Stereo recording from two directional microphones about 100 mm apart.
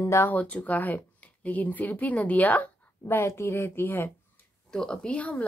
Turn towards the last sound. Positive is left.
turn(degrees=15)  # may be behind; listen again after turning